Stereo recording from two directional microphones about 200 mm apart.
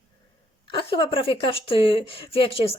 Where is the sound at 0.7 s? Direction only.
25° left (ahead or behind).